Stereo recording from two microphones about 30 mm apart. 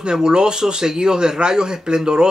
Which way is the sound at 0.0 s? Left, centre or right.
Right.